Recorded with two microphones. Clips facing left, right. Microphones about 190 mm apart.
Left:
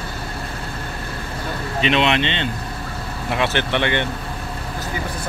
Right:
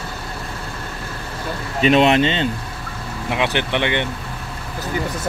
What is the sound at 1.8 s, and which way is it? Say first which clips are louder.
Speech: right 5 dB; 40° right (ahead or behind).